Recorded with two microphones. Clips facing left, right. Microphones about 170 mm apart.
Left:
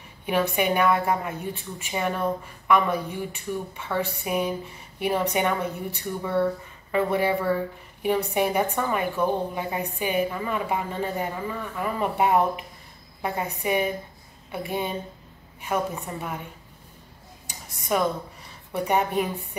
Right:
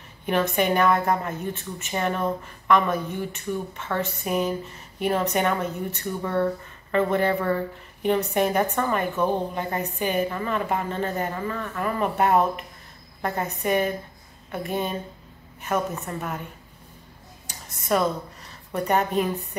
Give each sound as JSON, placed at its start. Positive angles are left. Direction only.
{"t": 0.3, "sound": "a woman's voice", "side_deg": 10}
{"t": 17.6, "sound": "a woman's voice", "side_deg": 10}